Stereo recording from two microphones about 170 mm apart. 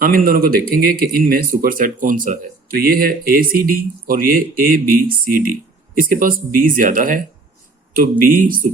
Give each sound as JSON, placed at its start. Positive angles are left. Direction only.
{"t": 0.0, "sound": "speech", "side_deg": -60}
{"t": 8.2, "sound": "speech", "side_deg": -55}